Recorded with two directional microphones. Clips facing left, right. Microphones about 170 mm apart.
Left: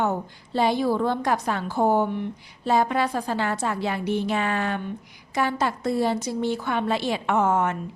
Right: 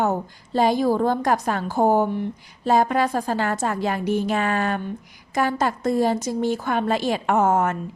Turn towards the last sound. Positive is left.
turn(degrees=-45)  # may be behind; listen again after turning